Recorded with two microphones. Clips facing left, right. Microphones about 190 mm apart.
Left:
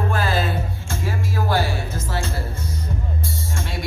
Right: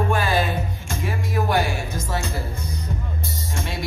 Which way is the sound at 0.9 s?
20° right (ahead or behind).